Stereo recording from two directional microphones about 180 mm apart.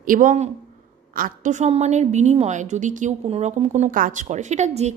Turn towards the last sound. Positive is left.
turn(degrees=-40)  # may be behind; listen again after turning